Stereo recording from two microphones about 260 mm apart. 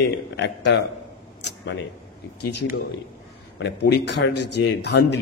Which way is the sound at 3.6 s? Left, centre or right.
Left.